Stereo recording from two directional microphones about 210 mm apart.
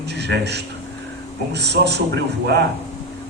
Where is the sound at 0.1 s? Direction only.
55° right (ahead or behind).